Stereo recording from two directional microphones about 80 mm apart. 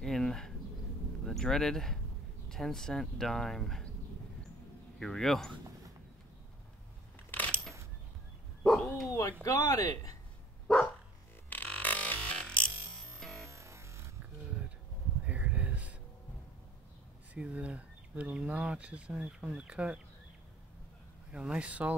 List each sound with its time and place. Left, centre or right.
0.0 s bird: centre
1.2 s speech: centre
4.9 s speech: centre
7.2 s a sound: centre
8.6 s bow-wow: centre
9.4 s speech: left
11.5 s music: left; by 13.5 s centre
13.5 s music: right
14.4 s a sound: centre
17.3 s speech: centre
21.3 s speech: centre